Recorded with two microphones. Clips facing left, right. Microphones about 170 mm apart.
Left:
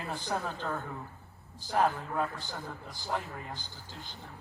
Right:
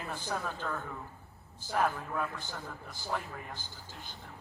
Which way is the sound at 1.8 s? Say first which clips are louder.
Left 3 dB; 25° left (ahead or behind).